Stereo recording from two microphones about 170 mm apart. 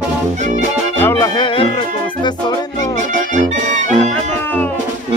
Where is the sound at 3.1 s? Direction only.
50° right (ahead or behind).